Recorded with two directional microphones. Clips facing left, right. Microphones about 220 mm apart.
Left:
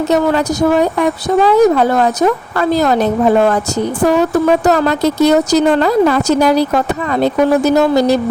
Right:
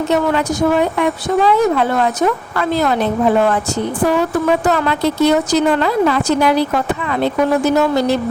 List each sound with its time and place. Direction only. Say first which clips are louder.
0.1 s speech: left 3 dB; 40° left (ahead or behind)